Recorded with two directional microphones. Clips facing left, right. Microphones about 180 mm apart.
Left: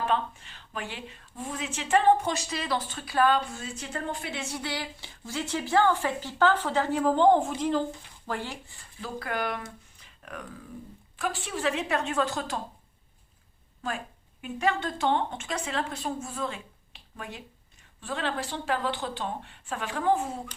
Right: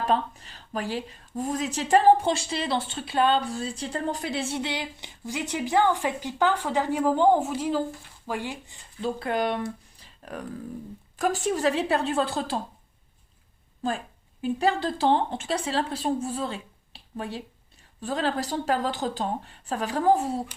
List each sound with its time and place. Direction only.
0.0 s a woman's voice: 40° right (ahead or behind)
10.0 s a sound: 35° right (ahead or behind)
11.2 s a woman's voice: 40° right (ahead or behind)
14.4 s a woman's voice: 35° right (ahead or behind)